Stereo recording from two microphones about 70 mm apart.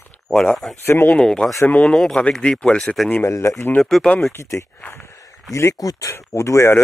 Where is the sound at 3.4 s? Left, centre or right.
Left.